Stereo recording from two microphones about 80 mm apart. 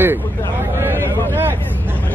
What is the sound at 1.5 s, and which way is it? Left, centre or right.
Vehicle, left.